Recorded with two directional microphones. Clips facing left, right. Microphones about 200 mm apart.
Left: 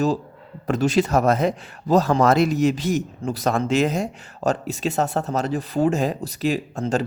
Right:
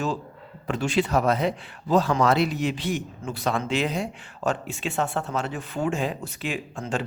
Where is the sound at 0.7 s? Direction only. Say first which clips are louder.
Left 4 dB; 40° left (ahead or behind).